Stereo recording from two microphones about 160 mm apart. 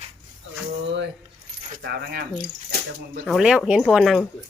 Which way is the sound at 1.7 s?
75° right (ahead or behind).